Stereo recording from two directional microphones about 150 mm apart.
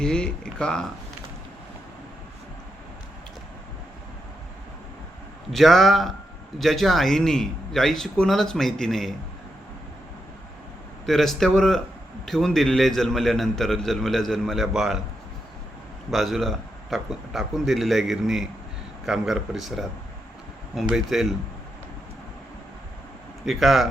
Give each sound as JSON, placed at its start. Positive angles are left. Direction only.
{"t": 0.0, "sound": "a man's voice", "side_deg": 5}
{"t": 5.5, "sound": "a man's voice", "side_deg": 0}
{"t": 11.0, "sound": "a man's voice", "side_deg": 0}
{"t": 16.1, "sound": "a man's voice", "side_deg": 0}
{"t": 23.5, "sound": "a man's voice", "side_deg": 0}